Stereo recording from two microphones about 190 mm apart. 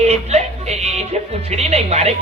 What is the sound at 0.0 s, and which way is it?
A woman's voice, 35° right (ahead or behind).